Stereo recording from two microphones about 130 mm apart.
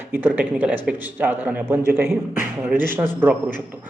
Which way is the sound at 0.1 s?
15° right (ahead or behind).